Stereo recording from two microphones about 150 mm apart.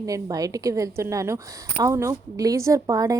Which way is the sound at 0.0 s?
25° right (ahead or behind).